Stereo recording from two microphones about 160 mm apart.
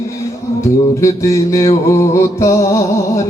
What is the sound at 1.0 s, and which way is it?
Music, 20° left (ahead or behind).